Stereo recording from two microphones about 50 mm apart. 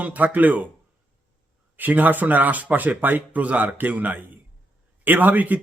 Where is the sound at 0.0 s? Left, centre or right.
Right.